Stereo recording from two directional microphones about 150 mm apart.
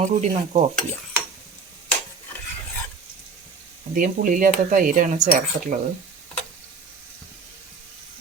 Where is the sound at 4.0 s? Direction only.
60° right (ahead or behind).